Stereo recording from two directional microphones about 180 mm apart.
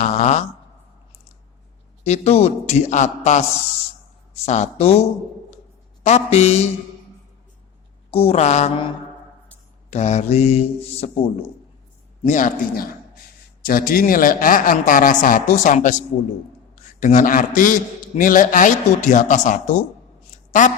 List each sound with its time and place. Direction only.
0.0 s a man's voice: 40° left (ahead or behind)
2.0 s a man's voice: 35° left (ahead or behind)
4.4 s a man's voice: 40° left (ahead or behind)
8.1 s a man's voice: 35° left (ahead or behind)
9.9 s a man's voice: 40° left (ahead or behind)
12.3 s a man's voice: 50° left (ahead or behind)